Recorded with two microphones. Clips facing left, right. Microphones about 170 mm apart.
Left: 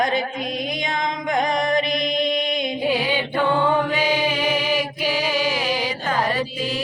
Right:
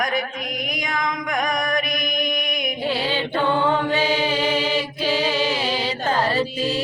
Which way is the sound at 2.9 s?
15° left (ahead or behind).